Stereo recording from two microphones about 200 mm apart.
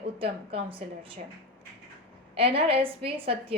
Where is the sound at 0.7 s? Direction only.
25° right (ahead or behind).